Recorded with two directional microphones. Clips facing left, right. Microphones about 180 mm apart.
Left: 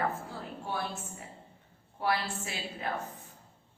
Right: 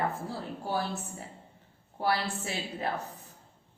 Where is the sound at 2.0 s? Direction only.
35° right (ahead or behind).